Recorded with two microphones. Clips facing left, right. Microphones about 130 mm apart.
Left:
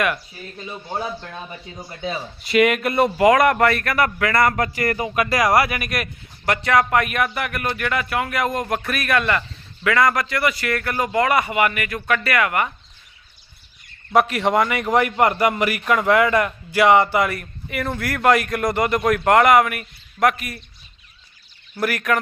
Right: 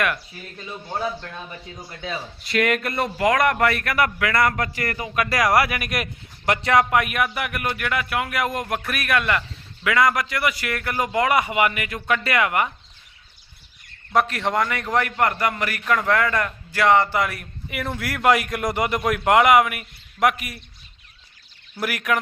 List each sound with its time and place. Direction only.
0.0 s a man's voice: 5° left (ahead or behind)
3.7 s speech: 10° right (ahead or behind)
4.9 s speech: 25° left (ahead or behind)
5.3 s speech: centre (ahead or behind)
6.0 s speech: 20° right (ahead or behind)
6.9 s speech: 10° right (ahead or behind)
14.1 s a man's voice: 5° left (ahead or behind); by 20.6 s 10° right (ahead or behind)
21.8 s speech: 10° right (ahead or behind)